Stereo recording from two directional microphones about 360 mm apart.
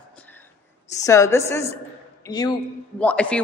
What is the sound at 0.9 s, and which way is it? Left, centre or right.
A woman's voice, centre.